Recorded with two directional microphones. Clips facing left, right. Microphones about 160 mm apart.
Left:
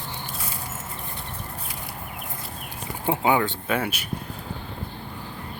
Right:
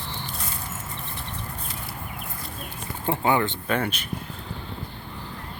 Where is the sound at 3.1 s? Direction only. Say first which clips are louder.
Left 1 dB; 10° left (ahead or behind).